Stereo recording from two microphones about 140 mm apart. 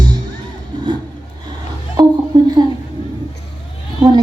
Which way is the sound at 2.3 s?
30° right (ahead or behind).